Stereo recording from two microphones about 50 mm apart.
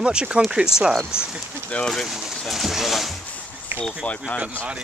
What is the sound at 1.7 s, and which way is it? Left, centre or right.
Speech, left.